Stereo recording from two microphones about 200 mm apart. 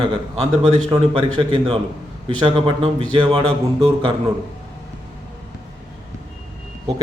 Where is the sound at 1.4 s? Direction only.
25° right (ahead or behind).